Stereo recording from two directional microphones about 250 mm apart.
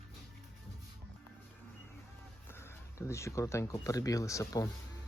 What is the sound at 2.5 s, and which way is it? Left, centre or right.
Speech, centre.